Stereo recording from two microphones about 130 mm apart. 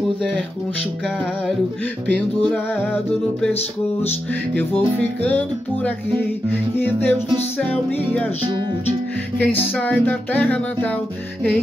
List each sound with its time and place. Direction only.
2.9 s music: 15° left (ahead or behind)
4.6 s music: 10° left (ahead or behind)
6.8 s music: 15° left (ahead or behind)
9.4 s music: 10° left (ahead or behind)